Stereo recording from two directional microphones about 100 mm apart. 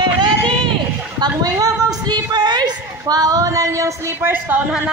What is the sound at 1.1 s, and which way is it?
A woman's voice, 40° right (ahead or behind).